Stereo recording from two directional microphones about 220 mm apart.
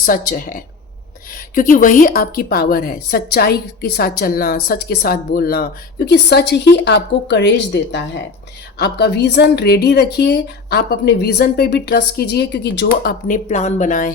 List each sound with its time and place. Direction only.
0.0 s a woman's voice: 40° left (ahead or behind)